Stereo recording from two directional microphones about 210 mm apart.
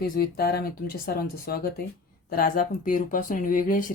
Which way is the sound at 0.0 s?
45° left (ahead or behind).